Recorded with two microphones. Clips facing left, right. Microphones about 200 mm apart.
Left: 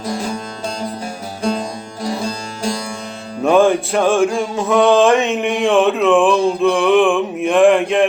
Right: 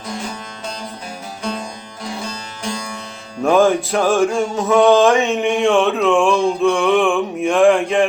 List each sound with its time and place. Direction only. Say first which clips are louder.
1.4 s music: left 6 dB; 30° left (ahead or behind)
3.4 s music: left 1 dB; centre (ahead or behind)